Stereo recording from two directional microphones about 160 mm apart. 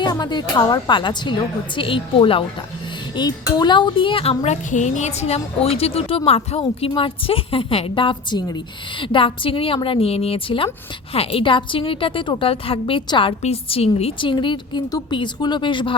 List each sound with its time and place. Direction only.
0.0 s a woman's voice: 25° left (ahead or behind)